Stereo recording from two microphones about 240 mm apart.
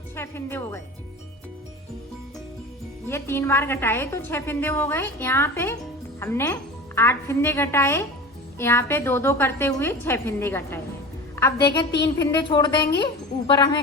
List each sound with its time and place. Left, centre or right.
0.2 s speech: centre
3.1 s a woman's voice: centre